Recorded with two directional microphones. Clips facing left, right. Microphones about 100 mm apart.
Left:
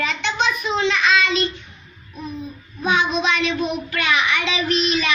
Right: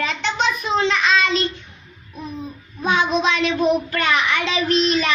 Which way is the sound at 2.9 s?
40° right (ahead or behind).